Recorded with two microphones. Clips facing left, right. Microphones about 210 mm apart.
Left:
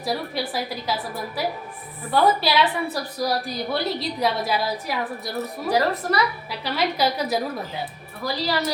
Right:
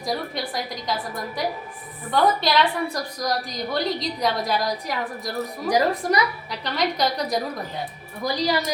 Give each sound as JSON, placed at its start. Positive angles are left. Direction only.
{"t": 0.0, "sound": "a woman's voice", "side_deg": 5}
{"t": 5.6, "sound": "a woman's voice", "side_deg": -15}
{"t": 6.5, "sound": "a woman's voice", "side_deg": 5}
{"t": 8.2, "sound": "a woman's voice", "side_deg": -15}